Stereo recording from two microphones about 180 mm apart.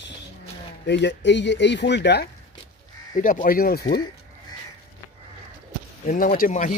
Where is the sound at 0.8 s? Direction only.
75° left (ahead or behind).